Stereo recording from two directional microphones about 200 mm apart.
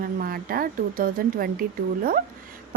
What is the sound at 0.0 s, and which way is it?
Speech, 45° right (ahead or behind).